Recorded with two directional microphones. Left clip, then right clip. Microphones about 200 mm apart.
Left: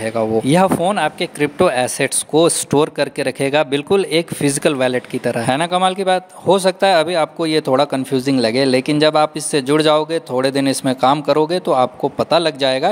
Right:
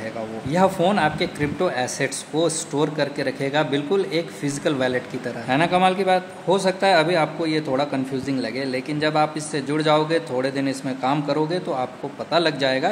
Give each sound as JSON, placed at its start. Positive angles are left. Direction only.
{"t": 0.0, "sound": "speech", "side_deg": 50}